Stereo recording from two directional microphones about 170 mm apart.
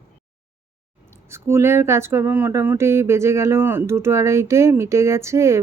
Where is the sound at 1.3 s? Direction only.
15° right (ahead or behind).